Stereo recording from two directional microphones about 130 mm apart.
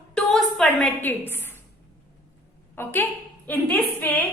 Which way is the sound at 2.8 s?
15° left (ahead or behind).